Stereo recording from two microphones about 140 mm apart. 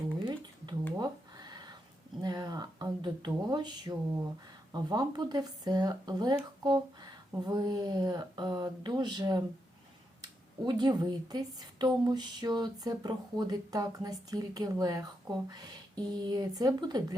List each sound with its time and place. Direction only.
0.3 s a sound: 30° right (ahead or behind)
4.7 s speech: 30° right (ahead or behind)
10.7 s speech: 30° right (ahead or behind)